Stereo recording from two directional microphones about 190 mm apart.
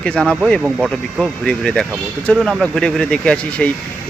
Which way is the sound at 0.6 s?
5° right (ahead or behind).